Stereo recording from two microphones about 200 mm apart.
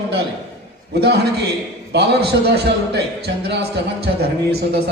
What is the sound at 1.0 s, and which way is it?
Speech, 55° right (ahead or behind).